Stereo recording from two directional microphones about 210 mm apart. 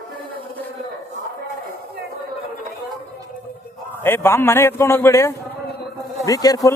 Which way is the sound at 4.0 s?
10° left (ahead or behind).